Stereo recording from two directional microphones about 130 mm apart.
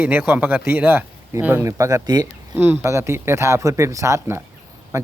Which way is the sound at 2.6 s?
15° right (ahead or behind).